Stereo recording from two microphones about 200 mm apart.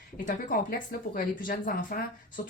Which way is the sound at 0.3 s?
45° left (ahead or behind).